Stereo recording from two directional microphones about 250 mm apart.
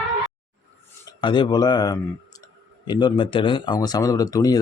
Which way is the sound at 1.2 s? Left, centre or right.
Centre.